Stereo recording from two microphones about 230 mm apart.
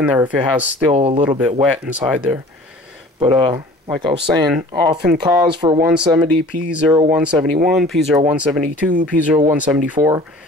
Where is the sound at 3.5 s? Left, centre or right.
Centre.